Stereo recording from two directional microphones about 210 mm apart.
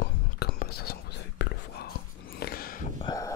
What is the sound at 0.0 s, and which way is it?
Whispering, 50° left (ahead or behind).